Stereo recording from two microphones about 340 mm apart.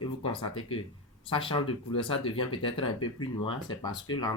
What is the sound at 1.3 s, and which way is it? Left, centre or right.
Speech, centre.